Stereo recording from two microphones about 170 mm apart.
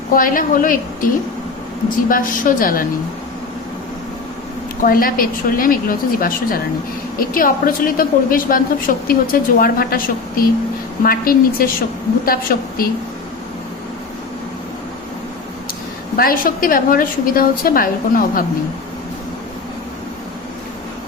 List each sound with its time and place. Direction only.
0.1 s a woman's voice: 55° left (ahead or behind)
4.8 s a woman's voice: 55° left (ahead or behind)
16.1 s a woman's voice: 55° left (ahead or behind)